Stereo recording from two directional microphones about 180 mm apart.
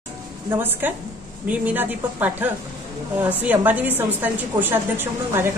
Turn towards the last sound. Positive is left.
turn(degrees=-10)  # may be behind; listen again after turning